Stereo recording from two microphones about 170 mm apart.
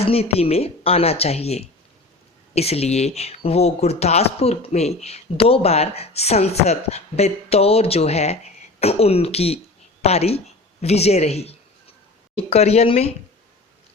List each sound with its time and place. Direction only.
0.0 s a woman's voice: 35° left (ahead or behind)